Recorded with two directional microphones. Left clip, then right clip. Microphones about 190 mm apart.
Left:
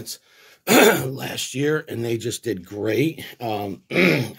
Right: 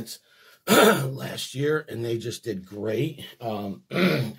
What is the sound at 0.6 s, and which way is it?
Speech, 40° left (ahead or behind).